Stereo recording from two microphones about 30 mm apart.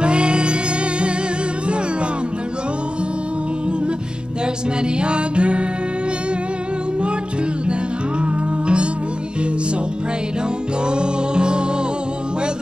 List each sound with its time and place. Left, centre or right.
0.0 s music: right
4.9 s music: right
8.2 s music: right
10.9 s music: right